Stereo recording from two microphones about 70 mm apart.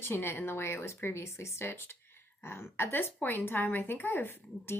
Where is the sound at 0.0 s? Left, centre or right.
Left.